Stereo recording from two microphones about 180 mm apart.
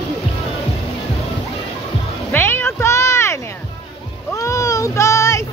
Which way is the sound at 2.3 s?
10° left (ahead or behind).